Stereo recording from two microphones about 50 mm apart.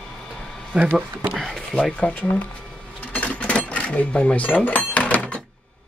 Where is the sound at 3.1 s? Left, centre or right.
Left.